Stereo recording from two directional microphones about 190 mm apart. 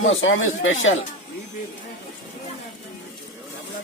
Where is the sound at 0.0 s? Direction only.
90° left.